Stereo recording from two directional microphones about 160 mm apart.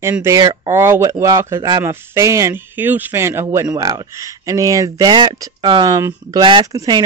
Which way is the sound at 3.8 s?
30° right (ahead or behind).